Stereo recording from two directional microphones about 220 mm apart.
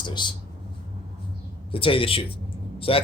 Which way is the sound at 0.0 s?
20° left (ahead or behind).